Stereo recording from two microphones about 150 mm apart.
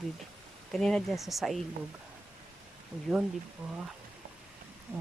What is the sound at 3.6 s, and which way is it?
Speech, 10° right (ahead or behind).